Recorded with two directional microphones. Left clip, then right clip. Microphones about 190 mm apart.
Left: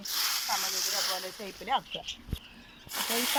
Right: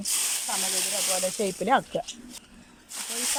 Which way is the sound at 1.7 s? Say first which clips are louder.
Right 6 dB; 65° right (ahead or behind).